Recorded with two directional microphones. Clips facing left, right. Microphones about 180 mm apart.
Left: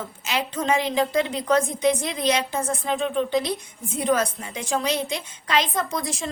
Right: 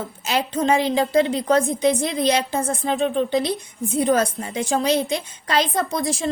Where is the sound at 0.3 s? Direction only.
35° right (ahead or behind).